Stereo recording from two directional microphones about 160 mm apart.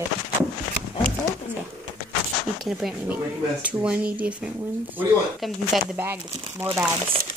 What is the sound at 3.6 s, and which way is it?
Speech, 10° right (ahead or behind).